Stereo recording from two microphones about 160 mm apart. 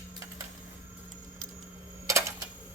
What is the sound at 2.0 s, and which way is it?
Typewriter, 20° right (ahead or behind).